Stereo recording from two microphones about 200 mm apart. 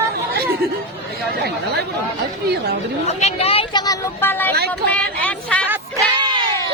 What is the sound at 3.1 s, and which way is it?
Speech, 35° left (ahead or behind).